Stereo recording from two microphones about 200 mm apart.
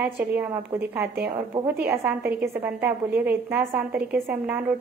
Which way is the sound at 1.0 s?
55° right (ahead or behind).